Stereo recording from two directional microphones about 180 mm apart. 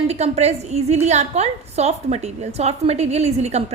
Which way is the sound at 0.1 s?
35° right (ahead or behind).